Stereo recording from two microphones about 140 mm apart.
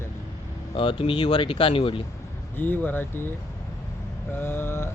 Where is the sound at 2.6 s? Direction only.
15° left (ahead or behind).